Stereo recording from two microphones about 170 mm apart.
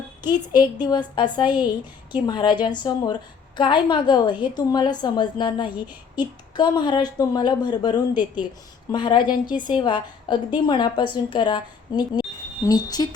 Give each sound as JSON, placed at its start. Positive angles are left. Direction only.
{"t": 0.2, "sound": "a woman's voice", "side_deg": 25}